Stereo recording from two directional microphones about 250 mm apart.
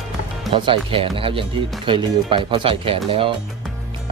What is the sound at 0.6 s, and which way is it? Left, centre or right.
Speech, right.